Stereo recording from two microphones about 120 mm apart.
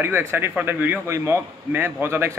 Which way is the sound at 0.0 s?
20° right (ahead or behind).